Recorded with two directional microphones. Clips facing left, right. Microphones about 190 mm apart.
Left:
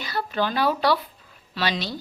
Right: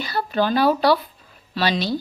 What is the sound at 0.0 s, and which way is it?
A woman's voice, 35° right (ahead or behind).